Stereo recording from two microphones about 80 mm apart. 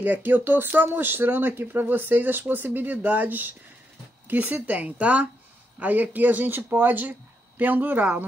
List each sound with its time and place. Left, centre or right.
0.0 s speech: right